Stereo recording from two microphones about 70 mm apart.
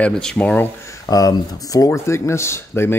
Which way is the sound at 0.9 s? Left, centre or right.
Left.